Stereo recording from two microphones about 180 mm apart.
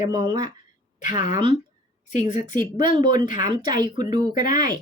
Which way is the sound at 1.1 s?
45° left (ahead or behind).